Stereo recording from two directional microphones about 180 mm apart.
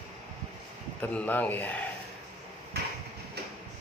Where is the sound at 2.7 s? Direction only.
65° right (ahead or behind).